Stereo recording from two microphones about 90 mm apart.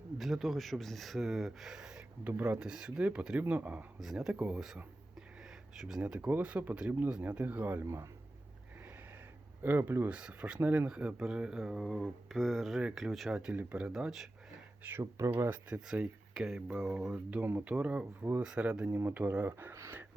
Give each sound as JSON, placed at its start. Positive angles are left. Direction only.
{"t": 0.2, "sound": "speech", "side_deg": 0}
{"t": 4.0, "sound": "speech", "side_deg": -5}
{"t": 6.0, "sound": "speech", "side_deg": -15}
{"t": 9.6, "sound": "speech", "side_deg": -25}
{"t": 10.1, "sound": "speech", "side_deg": -10}
{"t": 10.8, "sound": "speech", "side_deg": -10}
{"t": 15.4, "sound": "speech", "side_deg": -20}
{"t": 15.9, "sound": "speech", "side_deg": -5}
{"t": 18.9, "sound": "speech", "side_deg": -30}
{"t": 19.1, "sound": "speech", "side_deg": -20}